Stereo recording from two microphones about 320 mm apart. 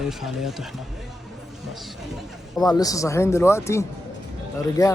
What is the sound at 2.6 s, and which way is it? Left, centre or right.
Speech, centre.